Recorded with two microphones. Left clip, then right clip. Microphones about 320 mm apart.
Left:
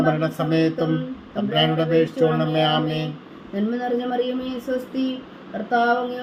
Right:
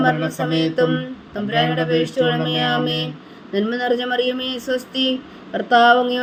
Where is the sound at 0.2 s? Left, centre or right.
Centre.